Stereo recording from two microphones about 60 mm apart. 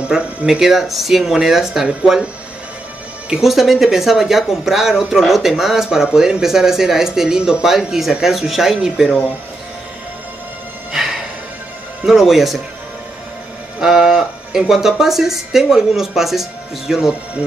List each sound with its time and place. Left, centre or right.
0.0 s speech: centre
0.5 s speech: centre
3.3 s speech: centre
10.9 s music: centre
12.1 s speech: centre
13.7 s speech: centre